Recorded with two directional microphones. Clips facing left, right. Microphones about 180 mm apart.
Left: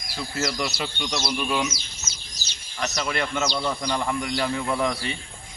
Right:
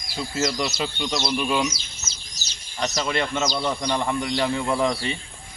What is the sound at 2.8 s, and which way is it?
Speech, 30° right (ahead or behind).